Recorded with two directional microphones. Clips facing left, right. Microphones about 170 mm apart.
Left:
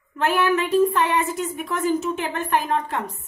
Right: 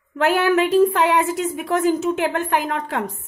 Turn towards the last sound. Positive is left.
turn(degrees=-90)